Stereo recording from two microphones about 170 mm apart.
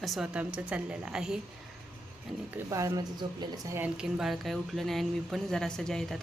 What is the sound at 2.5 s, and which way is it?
Speech, 20° right (ahead or behind).